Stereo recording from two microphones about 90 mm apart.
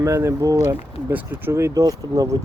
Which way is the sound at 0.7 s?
25° right (ahead or behind).